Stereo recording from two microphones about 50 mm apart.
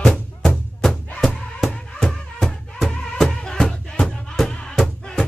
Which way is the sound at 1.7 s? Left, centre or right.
Left.